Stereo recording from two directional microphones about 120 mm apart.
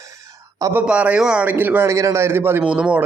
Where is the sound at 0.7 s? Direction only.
10° right (ahead or behind).